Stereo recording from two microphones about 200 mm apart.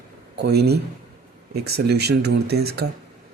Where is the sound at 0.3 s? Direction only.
55° right (ahead or behind).